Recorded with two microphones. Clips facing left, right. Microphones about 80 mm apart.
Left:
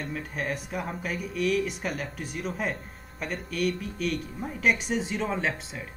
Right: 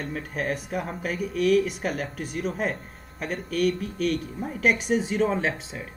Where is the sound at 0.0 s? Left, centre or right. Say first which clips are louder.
Right 3 dB; centre.